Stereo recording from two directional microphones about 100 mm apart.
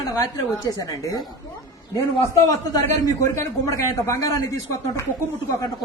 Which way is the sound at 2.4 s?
35° left (ahead or behind).